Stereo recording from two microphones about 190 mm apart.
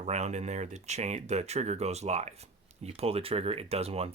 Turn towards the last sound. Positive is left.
turn(degrees=-30)  # may be behind; listen again after turning